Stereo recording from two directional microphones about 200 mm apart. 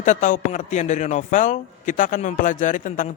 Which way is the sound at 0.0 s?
40° left (ahead or behind).